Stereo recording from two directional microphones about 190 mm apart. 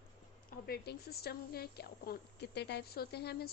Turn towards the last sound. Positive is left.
turn(degrees=55)  # may be behind; listen again after turning